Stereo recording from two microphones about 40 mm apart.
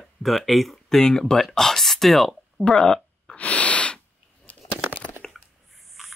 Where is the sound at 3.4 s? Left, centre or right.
Left.